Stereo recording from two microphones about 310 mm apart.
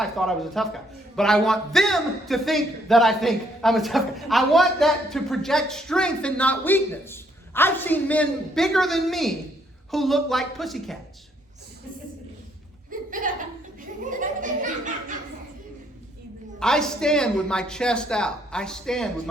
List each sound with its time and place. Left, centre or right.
0.0 s a man's voice: centre
12.9 s a sound: right
16.6 s a man's voice: centre